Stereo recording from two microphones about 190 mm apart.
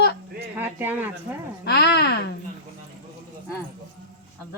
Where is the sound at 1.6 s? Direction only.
60° left (ahead or behind).